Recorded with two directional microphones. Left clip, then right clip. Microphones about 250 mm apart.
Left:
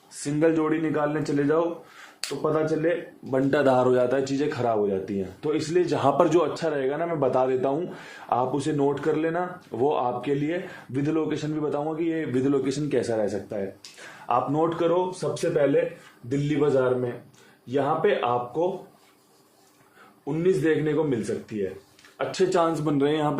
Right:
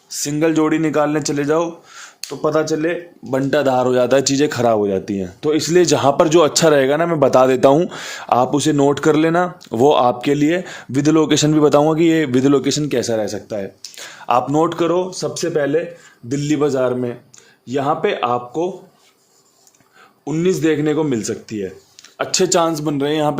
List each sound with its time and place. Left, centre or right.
0.3 s speech: right
0.6 s speech: right
3.5 s speech: right
6.5 s speech: right
20.2 s speech: right
22.5 s speech: right